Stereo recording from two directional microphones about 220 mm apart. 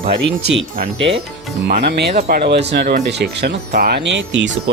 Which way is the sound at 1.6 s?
45° right (ahead or behind).